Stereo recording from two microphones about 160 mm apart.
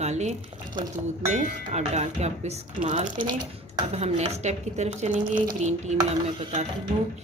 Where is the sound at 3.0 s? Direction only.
30° right (ahead or behind).